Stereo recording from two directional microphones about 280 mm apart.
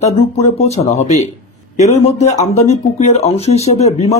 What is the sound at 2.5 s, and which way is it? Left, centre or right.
Speech, left.